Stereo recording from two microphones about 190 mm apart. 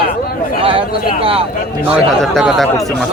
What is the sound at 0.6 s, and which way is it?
Speech, 30° right (ahead or behind).